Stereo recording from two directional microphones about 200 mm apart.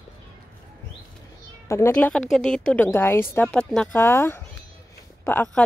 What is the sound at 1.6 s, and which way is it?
A woman's voice, 15° left (ahead or behind).